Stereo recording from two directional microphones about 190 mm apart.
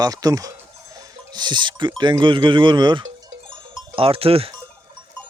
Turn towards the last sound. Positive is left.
turn(degrees=-30)  # may be behind; listen again after turning